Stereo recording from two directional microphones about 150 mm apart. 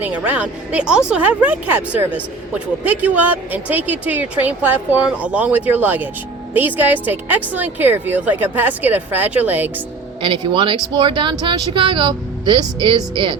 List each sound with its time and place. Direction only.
0.0 s speech: 10° right (ahead or behind)
10.2 s speech: 35° right (ahead or behind)